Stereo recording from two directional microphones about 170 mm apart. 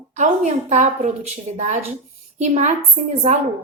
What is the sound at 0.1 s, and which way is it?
A woman's voice, 45° right (ahead or behind).